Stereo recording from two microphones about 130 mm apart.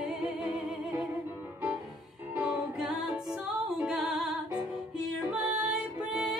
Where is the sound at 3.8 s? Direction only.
Centre (ahead or behind).